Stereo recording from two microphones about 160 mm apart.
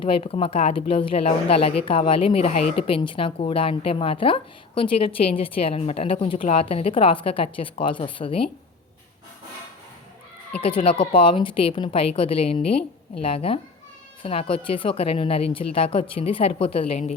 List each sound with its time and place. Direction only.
0.0 s speech: 35° left (ahead or behind)
10.6 s speech: 35° left (ahead or behind)